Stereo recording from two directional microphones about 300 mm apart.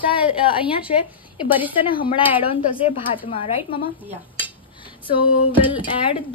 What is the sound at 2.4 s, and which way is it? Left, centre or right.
A woman's voice, centre.